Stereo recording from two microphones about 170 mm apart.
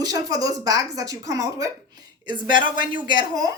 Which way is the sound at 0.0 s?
20° right (ahead or behind).